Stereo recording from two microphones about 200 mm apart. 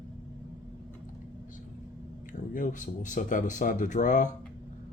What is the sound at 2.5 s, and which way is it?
Speech, 40° left (ahead or behind).